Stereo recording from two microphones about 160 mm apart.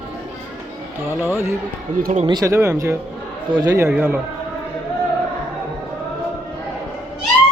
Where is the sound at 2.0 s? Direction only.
50° right (ahead or behind).